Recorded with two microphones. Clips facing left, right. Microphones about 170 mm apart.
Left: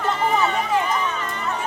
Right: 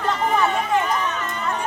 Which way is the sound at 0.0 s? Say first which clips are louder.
Even; centre (ahead or behind).